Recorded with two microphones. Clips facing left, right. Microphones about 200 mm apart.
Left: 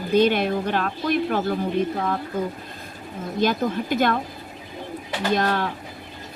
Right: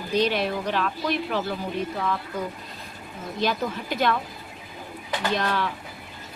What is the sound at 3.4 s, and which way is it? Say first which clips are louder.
Speech: left 4 dB; 50° left (ahead or behind).